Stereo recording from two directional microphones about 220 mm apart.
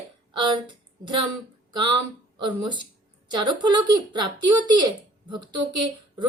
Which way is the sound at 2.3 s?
20° right (ahead or behind).